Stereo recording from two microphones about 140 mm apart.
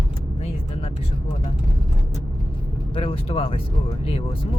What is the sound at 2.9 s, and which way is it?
Speech, 40° left (ahead or behind).